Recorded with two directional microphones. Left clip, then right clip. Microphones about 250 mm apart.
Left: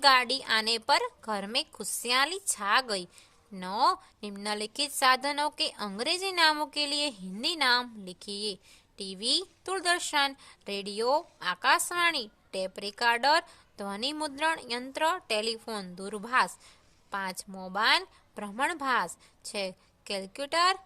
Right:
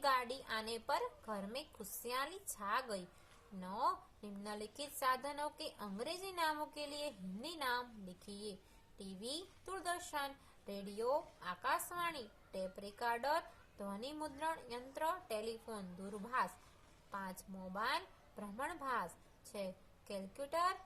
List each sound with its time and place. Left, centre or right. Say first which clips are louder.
0.0 s a woman's voice: left 14 dB; left
0.9 s a woman's voice: left 13 dB; left
1.3 s a woman's voice: left 14 dB; left
19.5 s a woman's voice: left 11 dB; left